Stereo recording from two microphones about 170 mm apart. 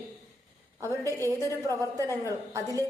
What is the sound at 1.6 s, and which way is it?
A woman's voice, 20° right (ahead or behind).